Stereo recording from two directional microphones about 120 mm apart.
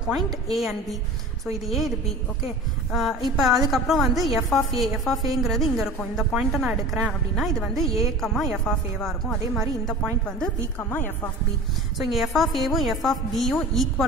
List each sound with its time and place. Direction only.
0.5 s a woman's voice: centre (ahead or behind)
2.9 s a woman's voice: centre (ahead or behind)
7.8 s a woman's voice: 25° right (ahead or behind)
8.2 s a woman's voice: centre (ahead or behind)
10.8 s speech: 20° left (ahead or behind)
12.1 s a woman's voice: centre (ahead or behind)